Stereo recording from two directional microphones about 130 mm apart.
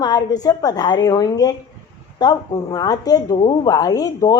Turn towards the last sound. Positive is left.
turn(degrees=30)  # may be behind; listen again after turning